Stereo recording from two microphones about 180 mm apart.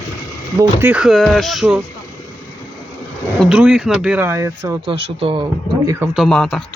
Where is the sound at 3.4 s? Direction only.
5° right (ahead or behind); by 5.4 s 30° right (ahead or behind).